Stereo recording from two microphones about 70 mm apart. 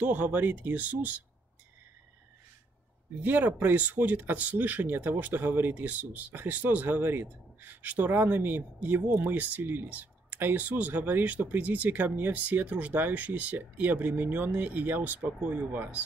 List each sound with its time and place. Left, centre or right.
0.0 s speech: right
3.2 s speech: right